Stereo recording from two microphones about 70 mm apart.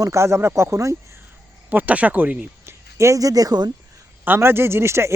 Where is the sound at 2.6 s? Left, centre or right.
Right.